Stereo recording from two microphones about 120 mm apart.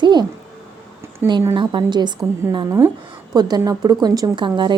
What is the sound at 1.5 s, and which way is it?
A woman's voice, 40° right (ahead or behind).